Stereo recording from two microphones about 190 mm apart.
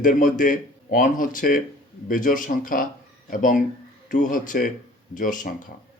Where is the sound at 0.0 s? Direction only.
45° left (ahead or behind).